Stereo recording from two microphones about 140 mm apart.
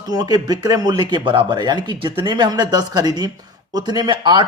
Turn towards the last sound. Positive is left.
turn(degrees=-30)  # may be behind; listen again after turning